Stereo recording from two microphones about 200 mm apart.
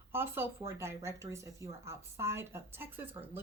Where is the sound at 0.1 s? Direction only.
10° right (ahead or behind).